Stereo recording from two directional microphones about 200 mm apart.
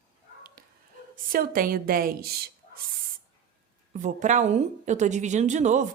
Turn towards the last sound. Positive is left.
turn(degrees=-35)  # may be behind; listen again after turning